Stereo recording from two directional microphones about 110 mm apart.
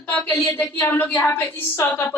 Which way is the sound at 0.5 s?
20° left (ahead or behind).